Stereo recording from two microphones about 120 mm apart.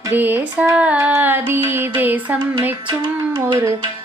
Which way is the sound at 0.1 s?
15° right (ahead or behind).